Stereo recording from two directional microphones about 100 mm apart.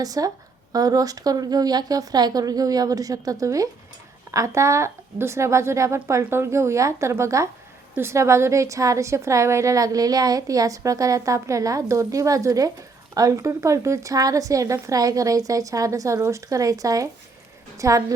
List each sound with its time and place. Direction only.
0.0 s a woman's voice: 40° right (ahead or behind)